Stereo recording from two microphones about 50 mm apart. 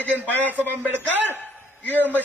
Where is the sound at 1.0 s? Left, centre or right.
Right.